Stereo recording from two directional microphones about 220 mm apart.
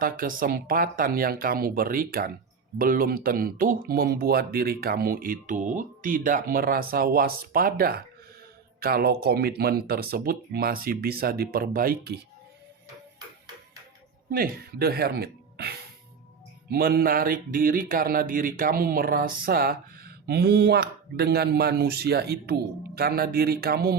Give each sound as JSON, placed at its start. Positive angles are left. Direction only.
{"t": 0.0, "sound": "speech", "side_deg": -40}
{"t": 14.3, "sound": "speech", "side_deg": -40}